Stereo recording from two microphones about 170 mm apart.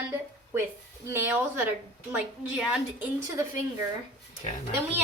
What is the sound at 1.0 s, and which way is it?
A woman's voice, 15° right (ahead or behind).